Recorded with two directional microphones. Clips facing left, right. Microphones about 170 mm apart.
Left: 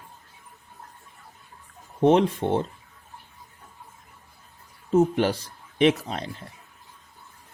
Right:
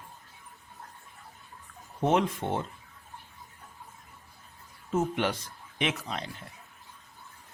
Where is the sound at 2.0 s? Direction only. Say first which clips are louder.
Left 7 dB; 30° left (ahead or behind).